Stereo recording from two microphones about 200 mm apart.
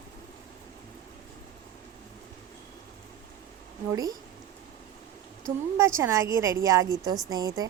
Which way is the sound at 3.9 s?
20° right (ahead or behind).